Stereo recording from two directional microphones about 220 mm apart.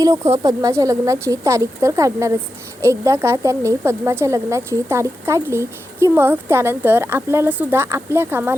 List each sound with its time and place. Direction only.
0.0 s a woman's voice: 15° right (ahead or behind)